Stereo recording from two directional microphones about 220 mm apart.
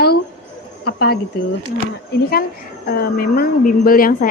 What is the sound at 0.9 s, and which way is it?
Speech, 45° left (ahead or behind).